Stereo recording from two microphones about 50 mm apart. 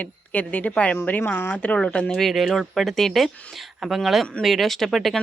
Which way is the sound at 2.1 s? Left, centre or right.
Centre.